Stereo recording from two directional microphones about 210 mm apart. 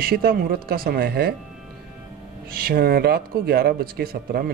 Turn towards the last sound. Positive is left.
turn(degrees=-45)  # may be behind; listen again after turning